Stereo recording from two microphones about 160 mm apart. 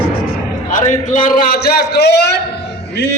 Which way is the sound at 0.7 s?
50° left (ahead or behind).